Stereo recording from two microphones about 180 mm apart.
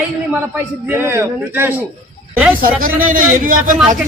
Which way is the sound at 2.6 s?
50° right (ahead or behind).